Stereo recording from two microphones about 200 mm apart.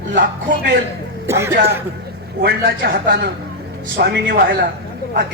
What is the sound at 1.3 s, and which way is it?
Speech, 15° right (ahead or behind).